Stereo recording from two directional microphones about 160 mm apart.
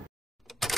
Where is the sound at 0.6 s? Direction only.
Centre (ahead or behind).